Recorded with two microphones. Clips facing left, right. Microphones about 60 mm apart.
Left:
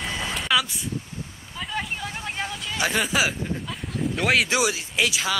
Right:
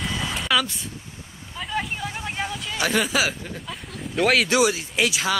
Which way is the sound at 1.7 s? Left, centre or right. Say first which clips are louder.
Right 2 dB; centre.